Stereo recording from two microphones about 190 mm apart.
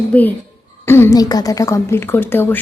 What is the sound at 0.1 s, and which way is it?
A woman's voice, 10° left (ahead or behind).